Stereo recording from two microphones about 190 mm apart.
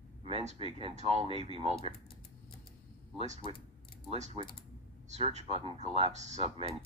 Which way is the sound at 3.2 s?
35° right (ahead or behind).